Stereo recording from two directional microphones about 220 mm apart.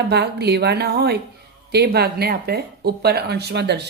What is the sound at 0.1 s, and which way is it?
Speech, 50° right (ahead or behind).